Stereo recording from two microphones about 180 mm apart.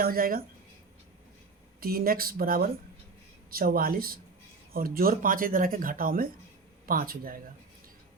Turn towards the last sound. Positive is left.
turn(degrees=-55)  # may be behind; listen again after turning